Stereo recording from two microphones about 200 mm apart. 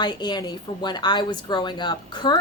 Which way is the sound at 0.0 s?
20° left (ahead or behind).